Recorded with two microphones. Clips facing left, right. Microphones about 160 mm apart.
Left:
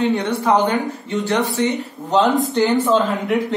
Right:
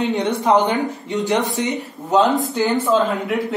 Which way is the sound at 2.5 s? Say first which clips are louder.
Left 2 dB; centre (ahead or behind).